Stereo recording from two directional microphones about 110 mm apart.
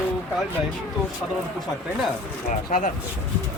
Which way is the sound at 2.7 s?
90° left.